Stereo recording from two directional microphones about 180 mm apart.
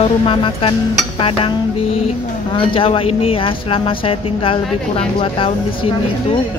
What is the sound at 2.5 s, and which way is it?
Speech, 30° left (ahead or behind).